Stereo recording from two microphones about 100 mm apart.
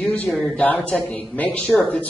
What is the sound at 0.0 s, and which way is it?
Speech, 15° left (ahead or behind).